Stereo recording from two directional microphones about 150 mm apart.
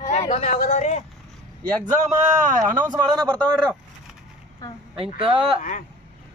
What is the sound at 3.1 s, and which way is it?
Speech, 5° left (ahead or behind).